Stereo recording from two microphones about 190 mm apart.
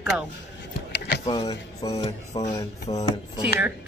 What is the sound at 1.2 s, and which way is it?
Speech, 30° left (ahead or behind).